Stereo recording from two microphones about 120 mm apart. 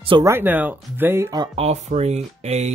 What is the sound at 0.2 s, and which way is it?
Speech, 20° right (ahead or behind).